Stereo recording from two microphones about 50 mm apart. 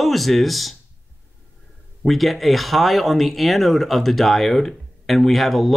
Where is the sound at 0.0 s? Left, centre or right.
Centre.